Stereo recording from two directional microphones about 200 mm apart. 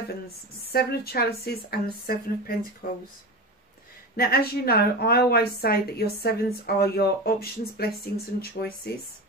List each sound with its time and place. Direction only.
0.7 s a woman's voice: 50° left (ahead or behind)
4.2 s a woman's voice: 50° left (ahead or behind)